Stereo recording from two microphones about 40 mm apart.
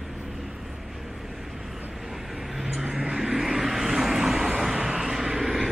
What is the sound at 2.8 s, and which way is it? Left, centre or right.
Vehicle, right.